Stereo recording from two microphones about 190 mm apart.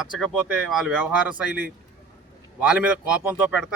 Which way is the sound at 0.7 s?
5° right (ahead or behind).